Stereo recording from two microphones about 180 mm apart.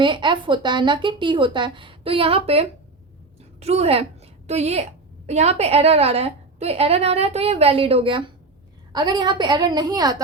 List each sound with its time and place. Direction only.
0.0 s a woman's voice: 25° right (ahead or behind)